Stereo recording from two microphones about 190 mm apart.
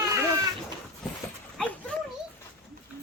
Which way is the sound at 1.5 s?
5° left (ahead or behind).